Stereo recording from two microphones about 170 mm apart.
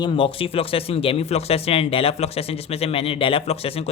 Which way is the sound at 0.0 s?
30° left (ahead or behind).